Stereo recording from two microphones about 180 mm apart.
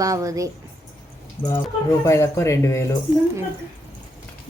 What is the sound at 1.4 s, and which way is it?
Speech, 15° left (ahead or behind).